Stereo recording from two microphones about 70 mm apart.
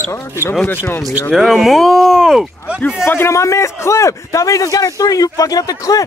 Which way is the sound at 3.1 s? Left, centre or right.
Left.